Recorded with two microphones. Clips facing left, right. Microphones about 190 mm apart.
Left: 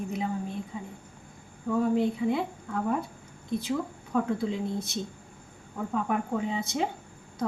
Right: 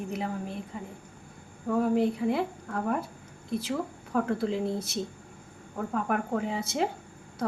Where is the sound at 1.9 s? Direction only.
Centre (ahead or behind).